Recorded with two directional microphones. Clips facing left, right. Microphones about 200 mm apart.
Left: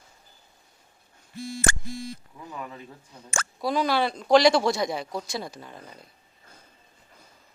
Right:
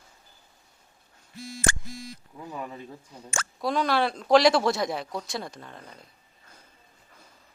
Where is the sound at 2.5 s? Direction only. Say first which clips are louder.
Right 1 dB; 25° right (ahead or behind).